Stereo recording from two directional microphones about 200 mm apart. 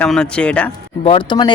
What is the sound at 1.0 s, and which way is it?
Speech, 25° left (ahead or behind).